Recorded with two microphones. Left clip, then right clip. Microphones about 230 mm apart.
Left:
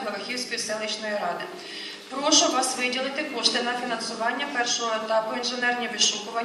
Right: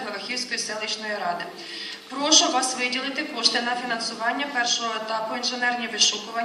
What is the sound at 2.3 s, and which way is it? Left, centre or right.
A woman's voice, right.